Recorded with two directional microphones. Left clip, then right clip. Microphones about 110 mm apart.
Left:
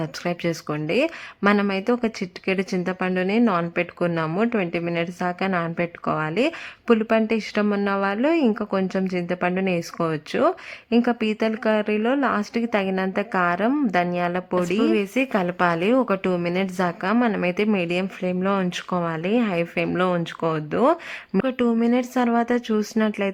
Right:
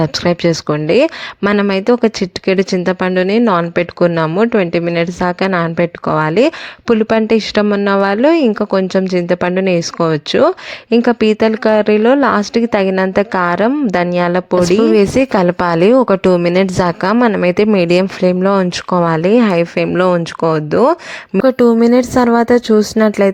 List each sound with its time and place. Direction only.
0.0 s speech: 40° right (ahead or behind)
21.3 s speech: 5° right (ahead or behind)
21.8 s speech: 50° right (ahead or behind)